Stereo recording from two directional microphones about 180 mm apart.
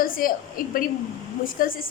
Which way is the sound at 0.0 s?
50° left (ahead or behind).